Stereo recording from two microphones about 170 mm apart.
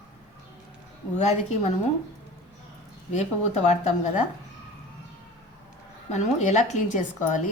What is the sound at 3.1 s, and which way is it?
Speech, 40° left (ahead or behind).